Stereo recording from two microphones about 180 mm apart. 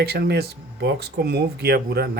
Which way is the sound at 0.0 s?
60° right (ahead or behind).